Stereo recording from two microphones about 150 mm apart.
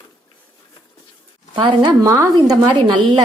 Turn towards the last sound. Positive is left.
turn(degrees=-35)  # may be behind; listen again after turning